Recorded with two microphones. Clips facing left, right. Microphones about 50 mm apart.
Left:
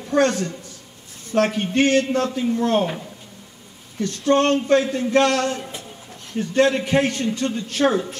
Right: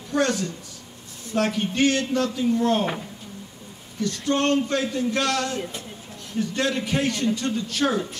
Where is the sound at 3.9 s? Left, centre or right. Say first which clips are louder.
Left 5 dB; left.